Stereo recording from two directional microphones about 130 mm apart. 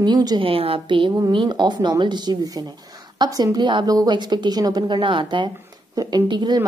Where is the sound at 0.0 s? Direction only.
30° right (ahead or behind).